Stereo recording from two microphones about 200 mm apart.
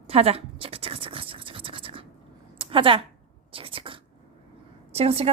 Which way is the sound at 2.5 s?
25° right (ahead or behind).